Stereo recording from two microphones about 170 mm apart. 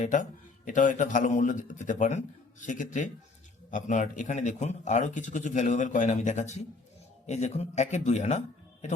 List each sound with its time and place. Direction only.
0.0 s a man's voice: 50° left (ahead or behind)